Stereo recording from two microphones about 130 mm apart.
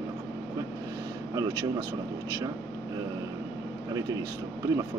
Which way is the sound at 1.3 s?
30° right (ahead or behind).